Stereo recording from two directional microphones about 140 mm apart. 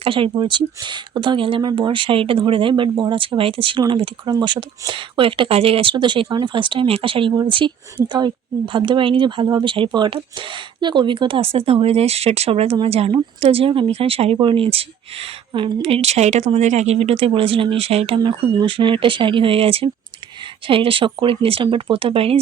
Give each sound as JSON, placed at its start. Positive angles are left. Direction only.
{"t": 0.0, "sound": "speech", "side_deg": -40}
{"t": 18.2, "sound": "speech", "side_deg": -30}